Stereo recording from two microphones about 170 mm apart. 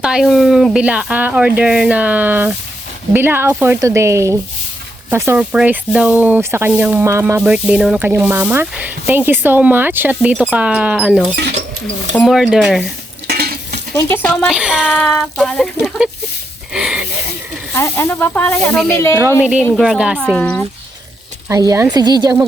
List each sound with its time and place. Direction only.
0.0 s speech: 5° right (ahead or behind)
13.2 s stir: 70° right (ahead or behind)
14.1 s speech: 10° left (ahead or behind)
17.7 s speech: 15° left (ahead or behind)
19.2 s speech: 10° right (ahead or behind)
20.1 s speech: 5° left (ahead or behind)
21.5 s speech: 20° right (ahead or behind)